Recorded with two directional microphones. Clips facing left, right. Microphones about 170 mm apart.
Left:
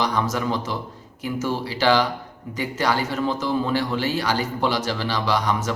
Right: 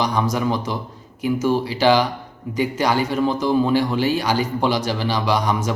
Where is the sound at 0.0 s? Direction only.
15° right (ahead or behind).